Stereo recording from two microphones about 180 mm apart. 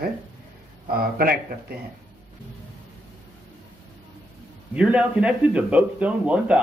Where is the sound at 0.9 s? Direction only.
55° right (ahead or behind).